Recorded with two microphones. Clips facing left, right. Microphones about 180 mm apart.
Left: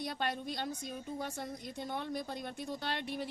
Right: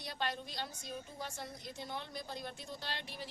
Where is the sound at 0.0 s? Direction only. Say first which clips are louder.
Left 4 dB; 50° left (ahead or behind).